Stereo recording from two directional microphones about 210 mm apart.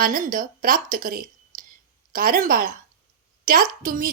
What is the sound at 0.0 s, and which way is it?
A woman's voice, 40° right (ahead or behind).